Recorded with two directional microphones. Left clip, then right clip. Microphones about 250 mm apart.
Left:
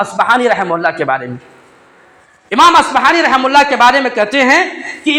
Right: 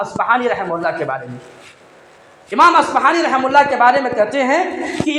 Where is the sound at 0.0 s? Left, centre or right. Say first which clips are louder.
Left 5 dB; left.